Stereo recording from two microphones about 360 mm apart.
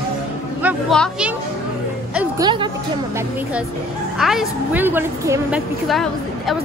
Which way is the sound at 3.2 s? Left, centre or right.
Centre.